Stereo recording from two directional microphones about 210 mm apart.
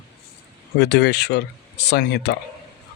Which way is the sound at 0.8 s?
55° left (ahead or behind).